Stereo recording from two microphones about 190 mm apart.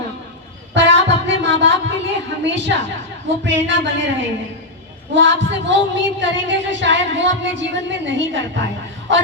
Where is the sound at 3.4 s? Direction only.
70° right (ahead or behind).